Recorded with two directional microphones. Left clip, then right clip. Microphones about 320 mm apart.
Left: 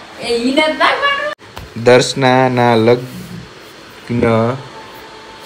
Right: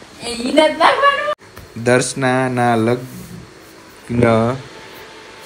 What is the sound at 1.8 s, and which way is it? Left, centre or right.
Speech, centre.